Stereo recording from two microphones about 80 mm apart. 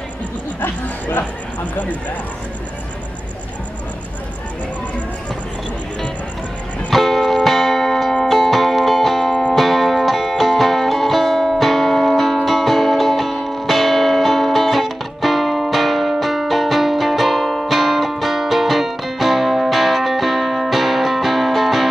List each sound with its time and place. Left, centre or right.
0.6 s speech: left
6.9 s music: centre
9.3 s music: centre
9.6 s music: centre